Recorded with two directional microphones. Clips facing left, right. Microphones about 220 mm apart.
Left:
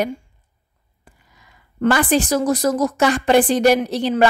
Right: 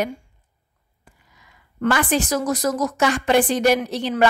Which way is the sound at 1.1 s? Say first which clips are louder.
Left 2 dB; 35° left (ahead or behind).